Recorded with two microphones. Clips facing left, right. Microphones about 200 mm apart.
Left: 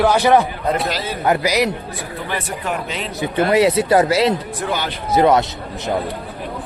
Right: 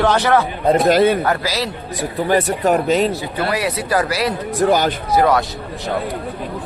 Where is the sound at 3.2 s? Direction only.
20° left (ahead or behind).